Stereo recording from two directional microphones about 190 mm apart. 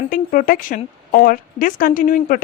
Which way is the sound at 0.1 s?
45° left (ahead or behind).